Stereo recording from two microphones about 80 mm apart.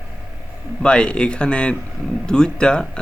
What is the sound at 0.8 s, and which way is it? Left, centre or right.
Speech, centre.